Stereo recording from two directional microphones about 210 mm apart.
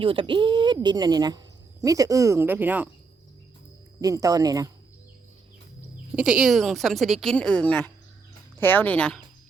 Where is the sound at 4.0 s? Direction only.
15° right (ahead or behind).